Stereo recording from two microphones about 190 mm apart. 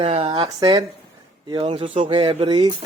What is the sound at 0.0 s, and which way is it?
Speech, 30° right (ahead or behind).